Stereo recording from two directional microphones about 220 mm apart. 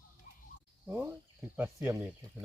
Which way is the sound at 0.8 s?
10° right (ahead or behind).